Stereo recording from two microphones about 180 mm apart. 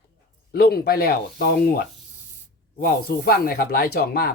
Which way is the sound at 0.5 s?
60° left (ahead or behind).